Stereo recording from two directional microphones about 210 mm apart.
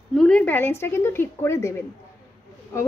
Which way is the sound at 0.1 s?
5° left (ahead or behind).